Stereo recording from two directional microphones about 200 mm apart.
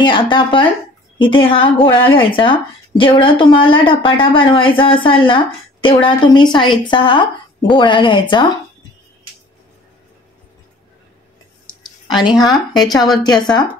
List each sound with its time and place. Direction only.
0.0 s a woman's voice: 25° left (ahead or behind)
12.1 s speech: centre (ahead or behind)
12.9 s a woman's voice: 20° left (ahead or behind)